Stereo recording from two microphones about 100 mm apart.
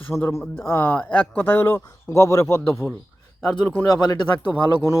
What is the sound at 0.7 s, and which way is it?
Speech, 15° left (ahead or behind).